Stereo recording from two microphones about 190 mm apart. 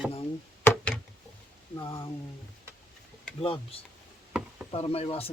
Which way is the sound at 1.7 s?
20° left (ahead or behind).